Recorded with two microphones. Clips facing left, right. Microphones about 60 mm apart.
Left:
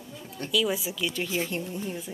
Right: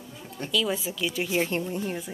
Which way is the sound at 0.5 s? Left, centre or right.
Centre.